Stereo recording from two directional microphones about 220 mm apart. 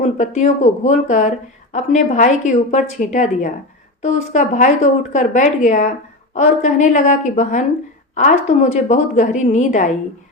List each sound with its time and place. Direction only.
0.0 s speech: 30° left (ahead or behind)